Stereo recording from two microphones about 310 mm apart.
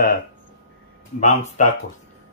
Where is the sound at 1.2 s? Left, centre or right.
Left.